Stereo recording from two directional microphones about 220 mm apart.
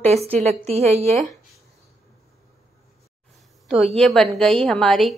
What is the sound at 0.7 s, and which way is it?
Speech, 30° right (ahead or behind).